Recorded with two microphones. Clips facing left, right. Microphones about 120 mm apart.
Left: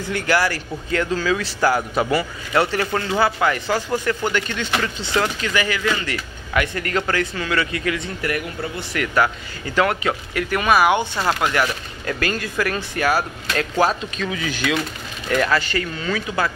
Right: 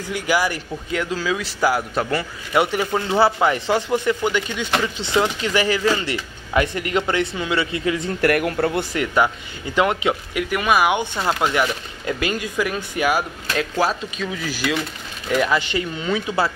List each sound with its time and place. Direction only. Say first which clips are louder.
0.1 s speech: left 1 dB; 10° right (ahead or behind)
3.1 s speech: right 3 dB; 25° right (ahead or behind)
4.2 s speech: right 1 dB; 10° right (ahead or behind)
8.2 s speech: right 7 dB; 65° right (ahead or behind)
8.9 s speech: right 1 dB; 20° right (ahead or behind)